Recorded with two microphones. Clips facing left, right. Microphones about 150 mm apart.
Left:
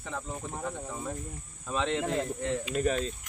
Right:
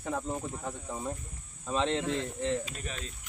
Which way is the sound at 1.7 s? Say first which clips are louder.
Right 1 dB; 30° right (ahead or behind).